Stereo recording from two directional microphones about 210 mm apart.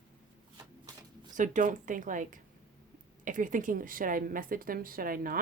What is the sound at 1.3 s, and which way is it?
A woman's voice, 35° right (ahead or behind).